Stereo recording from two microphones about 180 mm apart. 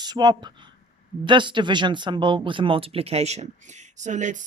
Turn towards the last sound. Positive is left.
turn(degrees=-45)  # may be behind; listen again after turning